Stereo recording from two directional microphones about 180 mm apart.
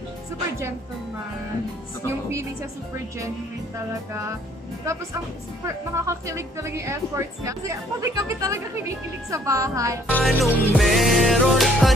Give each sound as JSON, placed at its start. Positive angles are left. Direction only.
{"t": 3.9, "sound": "speech", "side_deg": -15}
{"t": 5.7, "sound": "speech", "side_deg": -15}
{"t": 10.1, "sound": "music", "side_deg": 5}